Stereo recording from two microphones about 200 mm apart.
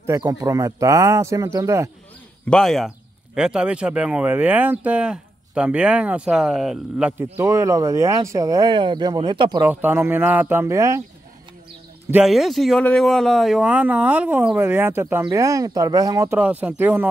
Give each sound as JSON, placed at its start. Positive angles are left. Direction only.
{"t": 0.0, "sound": "speech", "side_deg": -15}
{"t": 2.5, "sound": "speech", "side_deg": 0}
{"t": 9.7, "sound": "speech", "side_deg": -10}
{"t": 12.1, "sound": "speech", "side_deg": -5}